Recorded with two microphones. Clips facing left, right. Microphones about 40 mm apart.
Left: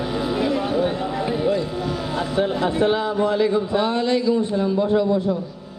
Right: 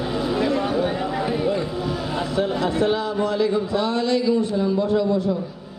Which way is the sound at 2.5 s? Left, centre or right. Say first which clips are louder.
Left 1 dB; left.